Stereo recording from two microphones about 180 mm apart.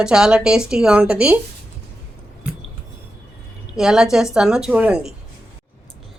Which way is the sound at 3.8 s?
5° right (ahead or behind).